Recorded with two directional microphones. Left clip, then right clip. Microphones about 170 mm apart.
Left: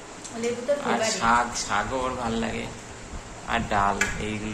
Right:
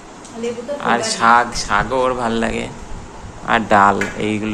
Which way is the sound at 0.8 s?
40° right (ahead or behind).